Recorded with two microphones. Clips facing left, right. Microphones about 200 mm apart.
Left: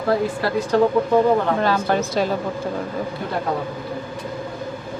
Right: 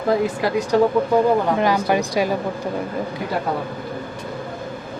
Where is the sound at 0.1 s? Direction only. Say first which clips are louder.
Right 1 dB; 15° right (ahead or behind).